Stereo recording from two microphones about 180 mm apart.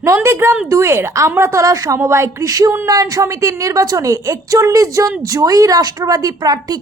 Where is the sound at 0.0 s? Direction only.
15° right (ahead or behind).